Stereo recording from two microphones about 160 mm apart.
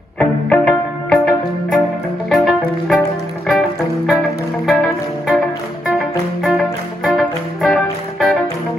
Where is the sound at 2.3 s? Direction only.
Centre (ahead or behind).